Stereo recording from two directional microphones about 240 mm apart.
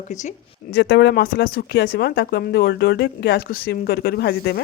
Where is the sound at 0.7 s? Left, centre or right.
Left.